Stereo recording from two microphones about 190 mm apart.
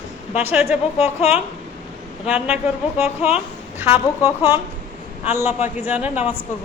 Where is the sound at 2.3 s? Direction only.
5° right (ahead or behind).